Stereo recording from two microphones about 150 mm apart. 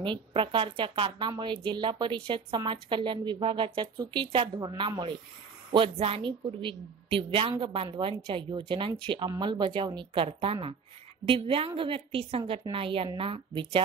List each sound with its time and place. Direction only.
0.0 s a woman's voice: 35° right (ahead or behind)